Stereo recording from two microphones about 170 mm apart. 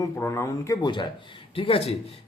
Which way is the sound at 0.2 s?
15° left (ahead or behind).